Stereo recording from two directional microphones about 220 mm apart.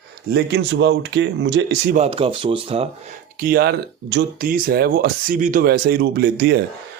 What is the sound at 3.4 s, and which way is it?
Speech, 40° right (ahead or behind).